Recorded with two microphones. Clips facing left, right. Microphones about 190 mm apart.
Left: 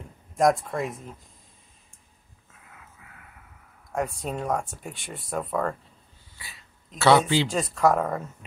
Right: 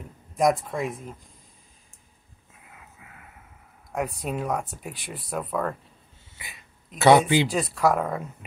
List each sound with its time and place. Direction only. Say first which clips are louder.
0.4 s speech: left 1 dB; centre (ahead or behind)
2.7 s a sound: right 2 dB; 20° right (ahead or behind)
3.9 s speech: even; centre (ahead or behind)
6.3 s a sound: right 2 dB; 20° right (ahead or behind)
7.0 s speech: right 2 dB; 15° right (ahead or behind)
7.4 s speech: even; centre (ahead or behind)